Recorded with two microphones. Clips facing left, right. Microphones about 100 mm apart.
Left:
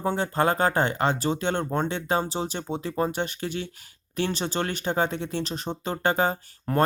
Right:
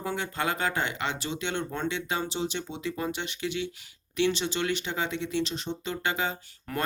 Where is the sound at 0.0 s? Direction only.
35° left (ahead or behind).